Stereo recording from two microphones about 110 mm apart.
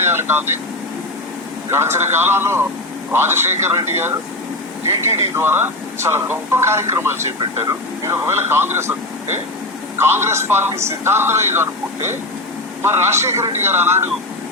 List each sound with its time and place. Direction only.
0.0 s speech: 20° right (ahead or behind)
1.7 s speech: 25° right (ahead or behind)
10.0 s speech: 20° right (ahead or behind)